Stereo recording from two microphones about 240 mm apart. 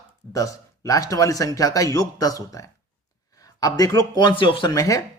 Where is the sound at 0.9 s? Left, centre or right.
Centre.